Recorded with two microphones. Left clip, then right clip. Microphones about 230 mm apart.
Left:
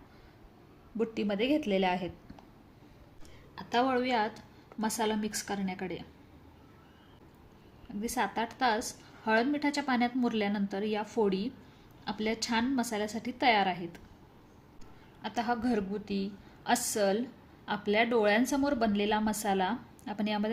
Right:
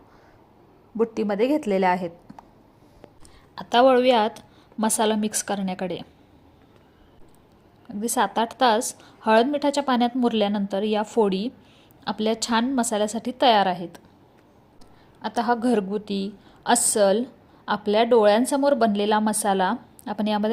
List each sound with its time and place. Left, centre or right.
0.9 s a woman's voice: centre
3.5 s a woman's voice: right
8.0 s a woman's voice: right
15.2 s a woman's voice: right